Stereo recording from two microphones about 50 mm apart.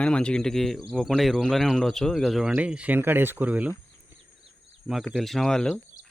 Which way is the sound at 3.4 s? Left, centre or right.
Right.